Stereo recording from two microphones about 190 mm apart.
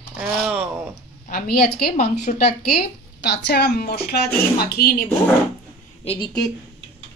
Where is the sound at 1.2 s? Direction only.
55° left (ahead or behind).